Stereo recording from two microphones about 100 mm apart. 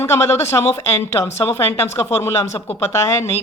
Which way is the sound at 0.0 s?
25° left (ahead or behind).